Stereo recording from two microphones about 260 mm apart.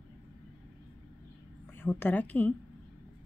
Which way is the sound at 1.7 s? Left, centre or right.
Centre.